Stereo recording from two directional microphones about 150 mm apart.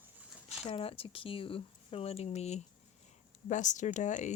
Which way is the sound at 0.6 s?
40° left (ahead or behind).